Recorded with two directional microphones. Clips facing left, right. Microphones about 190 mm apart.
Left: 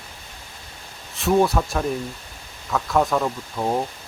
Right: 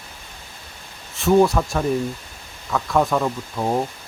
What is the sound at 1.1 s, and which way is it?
Speech, centre (ahead or behind).